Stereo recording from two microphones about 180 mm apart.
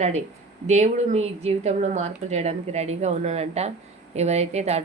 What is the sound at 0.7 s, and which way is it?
A woman's voice, 40° right (ahead or behind).